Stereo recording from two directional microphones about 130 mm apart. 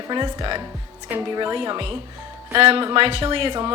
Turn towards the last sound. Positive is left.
turn(degrees=-45)  # may be behind; listen again after turning